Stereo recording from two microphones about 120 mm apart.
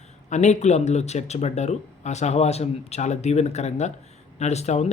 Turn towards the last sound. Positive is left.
turn(degrees=65)  # may be behind; listen again after turning